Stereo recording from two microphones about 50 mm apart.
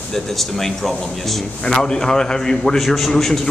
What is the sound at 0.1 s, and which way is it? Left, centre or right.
A man's voice, centre.